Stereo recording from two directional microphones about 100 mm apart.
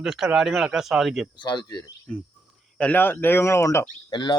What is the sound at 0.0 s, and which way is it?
Speech, 5° right (ahead or behind).